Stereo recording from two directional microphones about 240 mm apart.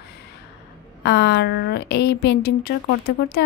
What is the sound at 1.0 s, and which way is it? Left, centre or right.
A woman's voice, left.